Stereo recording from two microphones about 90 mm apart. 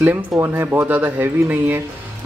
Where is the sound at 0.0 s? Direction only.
25° right (ahead or behind).